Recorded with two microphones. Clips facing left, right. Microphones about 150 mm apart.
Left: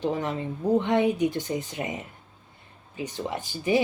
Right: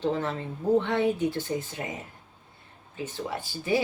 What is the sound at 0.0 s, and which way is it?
Speech, 15° left (ahead or behind).